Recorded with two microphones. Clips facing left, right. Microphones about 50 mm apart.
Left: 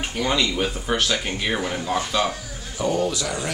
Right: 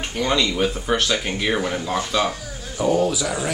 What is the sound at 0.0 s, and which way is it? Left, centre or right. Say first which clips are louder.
Speech: right 1 dB; centre.